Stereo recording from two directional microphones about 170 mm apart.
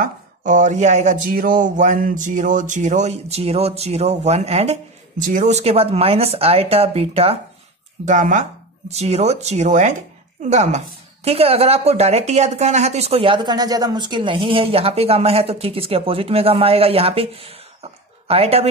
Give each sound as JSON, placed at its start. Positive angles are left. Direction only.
{"t": 0.0, "sound": "speech", "side_deg": -50}
{"t": 8.1, "sound": "speech", "side_deg": -50}